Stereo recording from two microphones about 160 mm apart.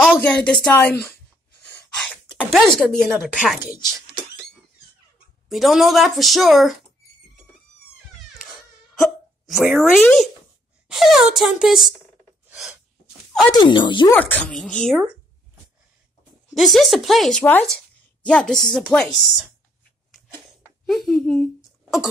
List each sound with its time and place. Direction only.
0.0 s speech: 5° left (ahead or behind)
0.9 s a sound: 15° left (ahead or behind)
2.0 s speech: 5° left (ahead or behind)
5.5 s speech: centre (ahead or behind)
9.0 s hiccup: centre (ahead or behind)
10.9 s speech: centre (ahead or behind)
12.4 s gasp: 5° right (ahead or behind)
13.5 s speech: 30° left (ahead or behind)
14.1 s speech: 10° left (ahead or behind)
16.5 s speech: centre (ahead or behind)
20.8 s speech: centre (ahead or behind)